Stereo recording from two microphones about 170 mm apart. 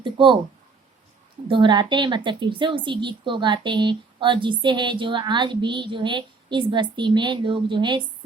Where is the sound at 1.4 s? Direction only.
30° right (ahead or behind).